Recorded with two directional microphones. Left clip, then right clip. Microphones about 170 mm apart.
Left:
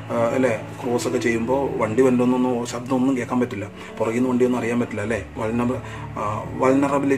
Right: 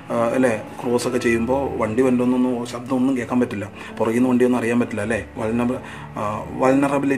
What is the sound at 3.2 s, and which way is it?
Speech, 20° right (ahead or behind).